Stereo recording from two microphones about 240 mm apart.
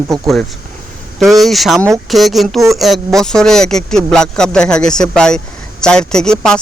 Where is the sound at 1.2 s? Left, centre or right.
Centre.